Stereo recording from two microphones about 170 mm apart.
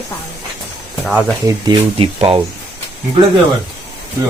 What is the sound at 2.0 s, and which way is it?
Speech, 30° right (ahead or behind).